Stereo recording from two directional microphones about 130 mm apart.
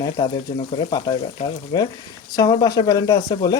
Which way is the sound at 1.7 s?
30° left (ahead or behind).